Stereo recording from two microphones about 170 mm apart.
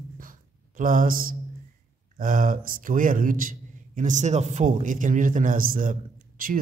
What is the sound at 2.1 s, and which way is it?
A man's voice, 50° right (ahead or behind).